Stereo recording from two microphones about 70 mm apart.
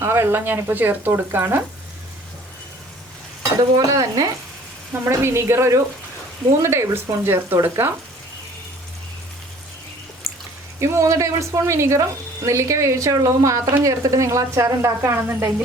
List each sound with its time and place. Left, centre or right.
0.0 s speech: right
3.6 s stir: right
5.0 s speech: right
10.8 s a woman's voice: right